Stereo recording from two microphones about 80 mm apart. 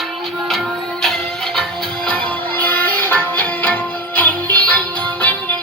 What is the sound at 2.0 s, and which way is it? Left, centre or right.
Music, centre.